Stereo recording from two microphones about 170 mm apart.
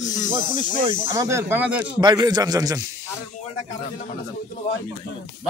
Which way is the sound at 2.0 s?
25° right (ahead or behind).